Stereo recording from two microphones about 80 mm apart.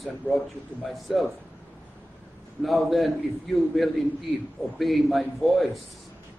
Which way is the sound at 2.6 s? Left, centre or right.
Centre.